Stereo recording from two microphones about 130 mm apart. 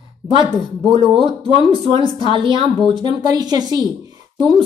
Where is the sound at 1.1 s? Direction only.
40° right (ahead or behind).